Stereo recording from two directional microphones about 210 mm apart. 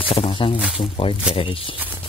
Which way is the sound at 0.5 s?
5° right (ahead or behind).